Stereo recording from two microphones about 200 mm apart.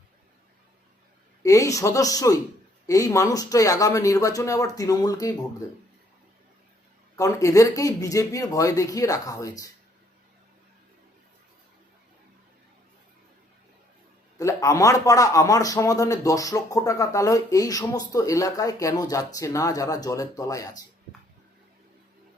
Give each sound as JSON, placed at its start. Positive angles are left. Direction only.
{"t": 1.4, "sound": "a man's voice", "side_deg": 15}
{"t": 7.2, "sound": "a man's voice", "side_deg": 15}
{"t": 14.3, "sound": "a man's voice", "side_deg": 15}